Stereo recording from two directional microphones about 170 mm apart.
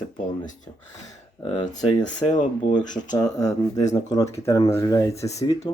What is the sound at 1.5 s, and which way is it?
Speech, 25° left (ahead or behind).